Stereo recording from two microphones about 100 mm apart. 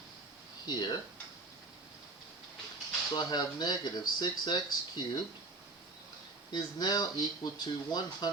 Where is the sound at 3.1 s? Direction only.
45° left (ahead or behind).